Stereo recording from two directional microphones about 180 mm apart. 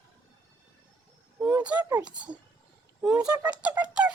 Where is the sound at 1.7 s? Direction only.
20° right (ahead or behind).